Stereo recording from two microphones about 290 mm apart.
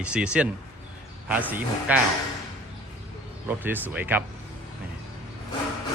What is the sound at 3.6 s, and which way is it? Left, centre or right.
Speech, centre.